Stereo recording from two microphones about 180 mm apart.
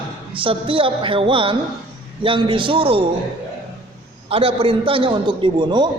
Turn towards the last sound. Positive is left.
turn(degrees=-25)  # may be behind; listen again after turning